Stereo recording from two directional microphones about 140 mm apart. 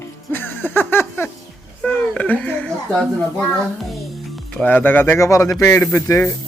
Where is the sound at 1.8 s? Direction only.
10° left (ahead or behind).